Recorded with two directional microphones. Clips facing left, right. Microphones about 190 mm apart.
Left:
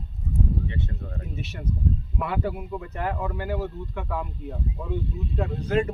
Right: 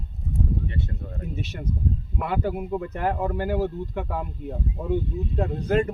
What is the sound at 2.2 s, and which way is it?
Speech, 45° right (ahead or behind).